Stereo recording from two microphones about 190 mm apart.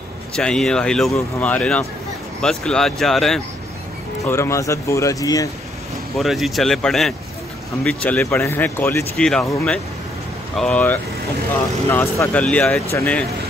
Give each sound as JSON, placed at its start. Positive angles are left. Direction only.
{"t": 0.4, "sound": "speech", "side_deg": 5}
{"t": 4.3, "sound": "speech", "side_deg": 15}
{"t": 6.1, "sound": "speech", "side_deg": 0}